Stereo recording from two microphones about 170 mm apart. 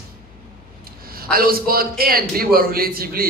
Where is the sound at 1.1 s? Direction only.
60° right (ahead or behind).